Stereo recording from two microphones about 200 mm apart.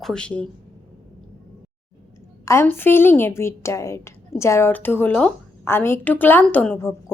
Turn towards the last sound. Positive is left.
turn(degrees=5)  # may be behind; listen again after turning